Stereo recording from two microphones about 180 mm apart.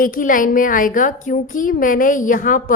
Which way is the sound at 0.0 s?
50° left (ahead or behind).